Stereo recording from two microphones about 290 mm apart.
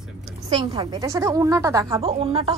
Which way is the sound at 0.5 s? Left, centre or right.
Centre.